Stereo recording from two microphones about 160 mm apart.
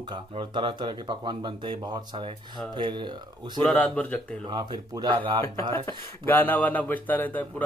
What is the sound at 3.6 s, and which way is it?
Speech, 5° left (ahead or behind).